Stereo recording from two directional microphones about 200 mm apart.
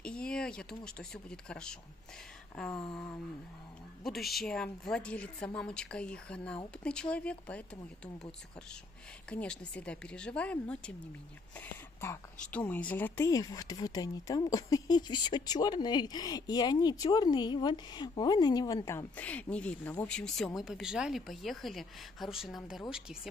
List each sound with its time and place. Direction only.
0.0 s speech: 5° left (ahead or behind)
2.5 s a sound: 5° left (ahead or behind)
4.0 s a woman's voice: centre (ahead or behind)
9.3 s a woman's voice: 5° left (ahead or behind)
12.5 s a woman's voice: 10° left (ahead or behind)